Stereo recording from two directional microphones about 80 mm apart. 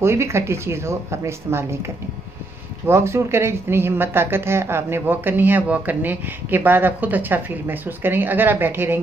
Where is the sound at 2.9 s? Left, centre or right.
Right.